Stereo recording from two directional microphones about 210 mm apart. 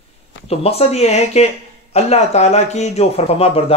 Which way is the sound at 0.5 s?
30° left (ahead or behind).